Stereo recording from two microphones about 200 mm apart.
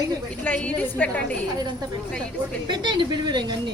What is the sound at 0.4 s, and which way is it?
Speech, 10° left (ahead or behind).